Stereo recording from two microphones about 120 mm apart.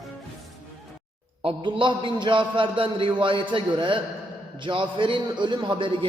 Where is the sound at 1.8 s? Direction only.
40° right (ahead or behind).